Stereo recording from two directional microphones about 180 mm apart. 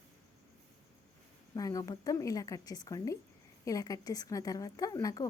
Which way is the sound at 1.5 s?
20° left (ahead or behind).